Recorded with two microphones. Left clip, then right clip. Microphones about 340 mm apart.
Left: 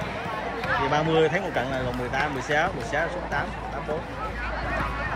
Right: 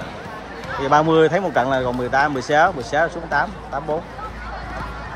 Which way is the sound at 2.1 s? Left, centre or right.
Right.